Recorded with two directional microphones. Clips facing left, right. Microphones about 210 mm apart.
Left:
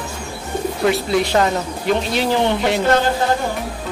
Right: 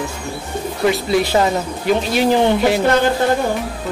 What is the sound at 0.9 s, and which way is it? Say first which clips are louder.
A man's voice: right 2 dB; centre (ahead or behind).